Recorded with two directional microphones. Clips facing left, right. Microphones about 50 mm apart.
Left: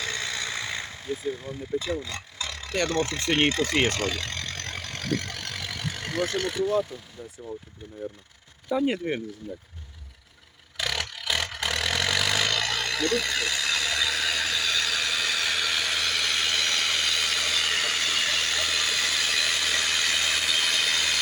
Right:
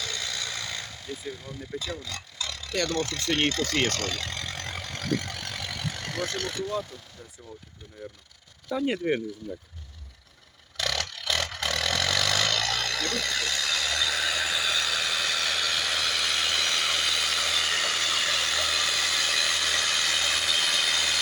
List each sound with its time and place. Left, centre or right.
0.0 s vehicle: left
1.8 s a sound: left
2.8 s speech: left; by 4.2 s centre
4.2 s vehicle: centre
8.7 s speech: centre
10.8 s vehicle: centre